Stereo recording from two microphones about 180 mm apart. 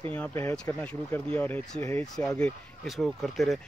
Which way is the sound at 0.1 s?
10° left (ahead or behind).